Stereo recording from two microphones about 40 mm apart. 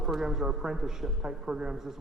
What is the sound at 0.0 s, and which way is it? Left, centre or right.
A man's voice, centre.